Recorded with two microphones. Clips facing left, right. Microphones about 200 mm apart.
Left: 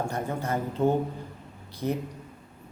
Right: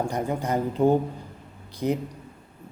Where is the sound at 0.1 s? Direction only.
15° right (ahead or behind).